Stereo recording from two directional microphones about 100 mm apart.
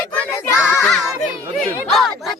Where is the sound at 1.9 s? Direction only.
Centre (ahead or behind).